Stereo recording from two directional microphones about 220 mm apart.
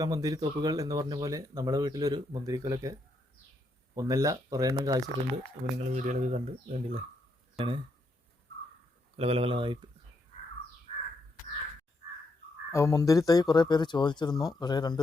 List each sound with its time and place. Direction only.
0.0 s speech: 15° right (ahead or behind)
3.9 s speech: 15° right (ahead or behind)
5.8 s speech: 30° right (ahead or behind)
9.1 s speech: 25° right (ahead or behind)
12.7 s speech: 15° left (ahead or behind)